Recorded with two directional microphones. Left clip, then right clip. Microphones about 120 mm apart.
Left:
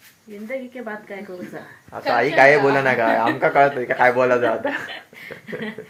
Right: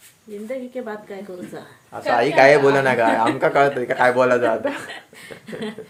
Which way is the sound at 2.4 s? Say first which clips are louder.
Right 1 dB; 30° right (ahead or behind).